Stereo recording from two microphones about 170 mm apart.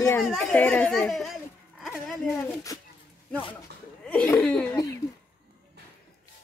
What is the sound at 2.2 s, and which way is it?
Speech, 15° left (ahead or behind).